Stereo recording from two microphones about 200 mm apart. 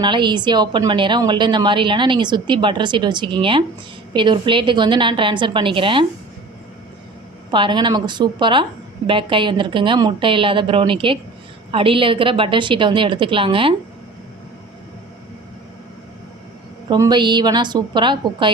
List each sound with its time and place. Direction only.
0.0 s a woman's voice: 25° right (ahead or behind)
7.5 s a woman's voice: 25° right (ahead or behind)
16.9 s a woman's voice: 20° right (ahead or behind)